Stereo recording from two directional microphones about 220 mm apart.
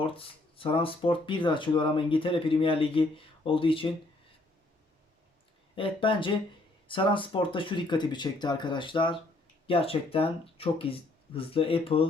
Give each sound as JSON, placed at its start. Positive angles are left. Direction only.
{"t": 0.0, "sound": "speech", "side_deg": 25}
{"t": 5.7, "sound": "speech", "side_deg": 25}